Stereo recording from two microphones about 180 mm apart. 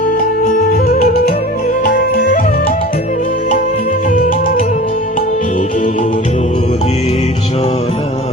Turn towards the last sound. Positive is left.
turn(degrees=35)  # may be behind; listen again after turning